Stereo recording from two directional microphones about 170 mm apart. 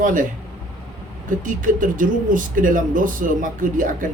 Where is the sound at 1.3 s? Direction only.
50° right (ahead or behind).